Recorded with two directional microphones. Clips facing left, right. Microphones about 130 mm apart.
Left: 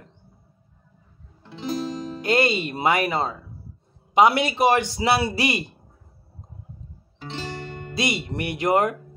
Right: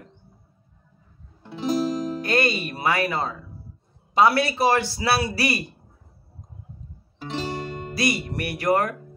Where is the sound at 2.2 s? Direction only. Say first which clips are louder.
Left 5 dB; 20° left (ahead or behind).